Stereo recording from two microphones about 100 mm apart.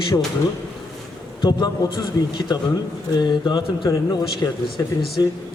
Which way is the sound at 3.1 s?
45° left (ahead or behind).